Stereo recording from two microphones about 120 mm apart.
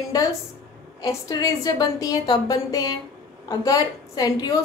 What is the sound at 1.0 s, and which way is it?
A woman's voice, 30° left (ahead or behind).